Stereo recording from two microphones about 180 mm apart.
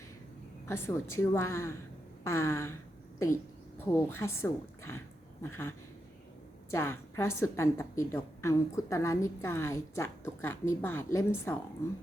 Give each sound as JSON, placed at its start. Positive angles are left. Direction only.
{"t": 0.7, "sound": "a woman's voice", "side_deg": 15}
{"t": 3.9, "sound": "a woman's voice", "side_deg": 15}